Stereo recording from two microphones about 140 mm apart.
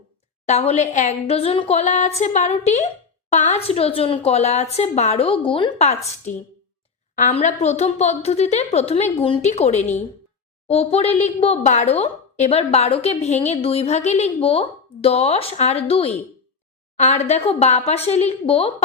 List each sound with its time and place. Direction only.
0.4 s a woman's voice: 55° left (ahead or behind); by 5.7 s 35° left (ahead or behind)
7.3 s a woman's voice: 50° left (ahead or behind)